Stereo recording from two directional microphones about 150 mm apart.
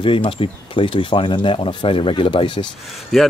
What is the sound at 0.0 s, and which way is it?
Speech, 35° left (ahead or behind).